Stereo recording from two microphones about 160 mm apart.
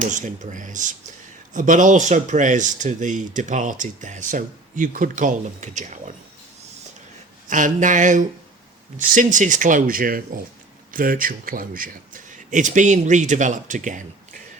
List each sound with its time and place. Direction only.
0.0 s speech: 50° right (ahead or behind)
7.4 s speech: 55° right (ahead or behind)